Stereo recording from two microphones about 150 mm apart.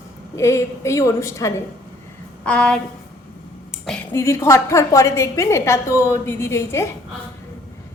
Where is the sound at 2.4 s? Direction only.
5° left (ahead or behind).